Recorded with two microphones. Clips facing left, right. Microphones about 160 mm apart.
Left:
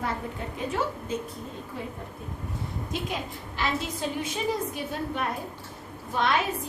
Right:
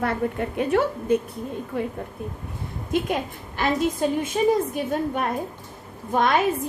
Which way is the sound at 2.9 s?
55° right (ahead or behind).